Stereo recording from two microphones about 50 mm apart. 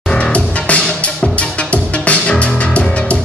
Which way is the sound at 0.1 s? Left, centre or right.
Left.